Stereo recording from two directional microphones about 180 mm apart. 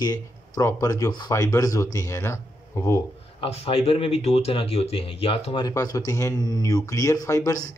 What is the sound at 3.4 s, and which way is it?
Speech, 35° left (ahead or behind).